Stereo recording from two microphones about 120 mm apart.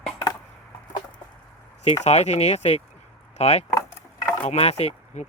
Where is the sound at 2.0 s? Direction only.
65° left (ahead or behind).